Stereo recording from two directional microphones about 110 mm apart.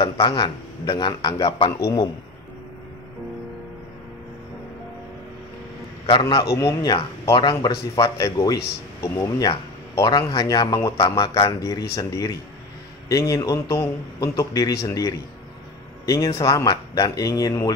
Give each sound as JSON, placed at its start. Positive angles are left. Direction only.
{"t": 0.0, "sound": "a man's voice", "side_deg": 45}
{"t": 6.0, "sound": "a man's voice", "side_deg": 50}
{"t": 6.5, "sound": "speech", "side_deg": 30}